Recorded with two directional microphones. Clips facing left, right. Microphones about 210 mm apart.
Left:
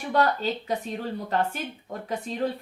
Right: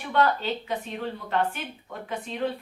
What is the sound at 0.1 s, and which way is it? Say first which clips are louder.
A woman's voice: even; 40° left (ahead or behind).